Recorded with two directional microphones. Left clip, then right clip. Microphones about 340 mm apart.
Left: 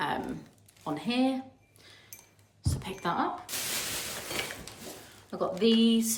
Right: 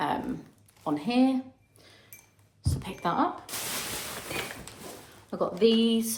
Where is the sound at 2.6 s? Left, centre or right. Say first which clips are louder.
Right 3 dB; centre.